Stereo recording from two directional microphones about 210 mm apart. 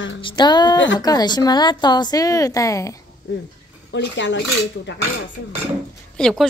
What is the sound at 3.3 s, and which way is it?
Speech, 55° left (ahead or behind).